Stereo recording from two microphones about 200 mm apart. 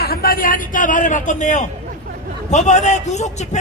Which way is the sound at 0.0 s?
50° left (ahead or behind).